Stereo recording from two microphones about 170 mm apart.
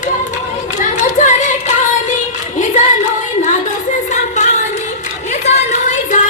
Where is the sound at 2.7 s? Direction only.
45° left (ahead or behind).